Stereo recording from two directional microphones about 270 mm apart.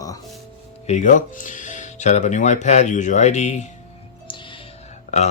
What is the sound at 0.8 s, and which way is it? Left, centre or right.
Speech, left.